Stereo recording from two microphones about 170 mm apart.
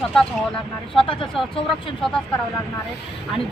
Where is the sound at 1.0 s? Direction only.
30° left (ahead or behind).